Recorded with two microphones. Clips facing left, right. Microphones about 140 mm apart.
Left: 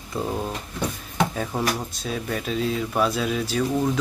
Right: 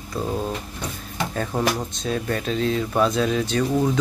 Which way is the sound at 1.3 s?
5° left (ahead or behind).